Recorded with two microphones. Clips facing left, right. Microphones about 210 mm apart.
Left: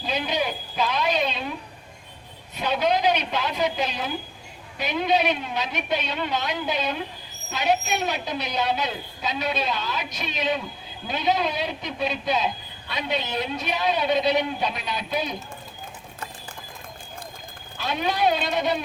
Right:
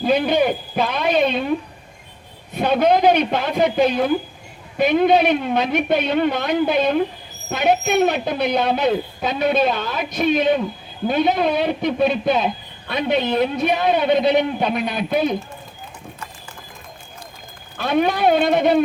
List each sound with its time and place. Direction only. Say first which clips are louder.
0.0 s a man's voice: right 10 dB; 55° right (ahead or behind)
2.6 s speech: right 7 dB; 55° right (ahead or behind)
17.7 s speech: right 7 dB; 55° right (ahead or behind)